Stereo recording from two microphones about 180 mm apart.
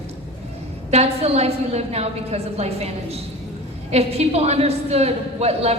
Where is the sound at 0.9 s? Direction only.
35° right (ahead or behind).